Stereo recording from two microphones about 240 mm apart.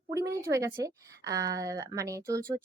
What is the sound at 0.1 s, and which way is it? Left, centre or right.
A woman's voice, centre.